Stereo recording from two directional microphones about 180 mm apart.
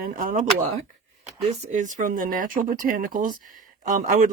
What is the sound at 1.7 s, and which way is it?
Speech, 45° right (ahead or behind).